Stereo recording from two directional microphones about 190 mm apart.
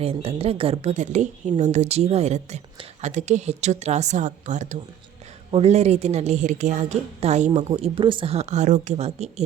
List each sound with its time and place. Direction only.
0.0 s speech: 30° right (ahead or behind)